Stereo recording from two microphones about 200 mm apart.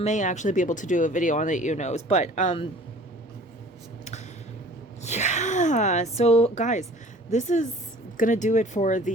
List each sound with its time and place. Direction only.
0.0 s speech: 40° left (ahead or behind)
5.0 s speech: 35° left (ahead or behind)